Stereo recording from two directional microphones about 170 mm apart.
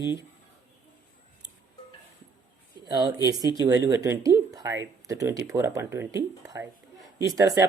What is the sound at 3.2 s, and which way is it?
Speech, 20° right (ahead or behind).